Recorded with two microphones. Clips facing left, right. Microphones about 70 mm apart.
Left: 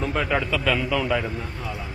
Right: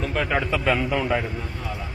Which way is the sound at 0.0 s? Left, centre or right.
Centre.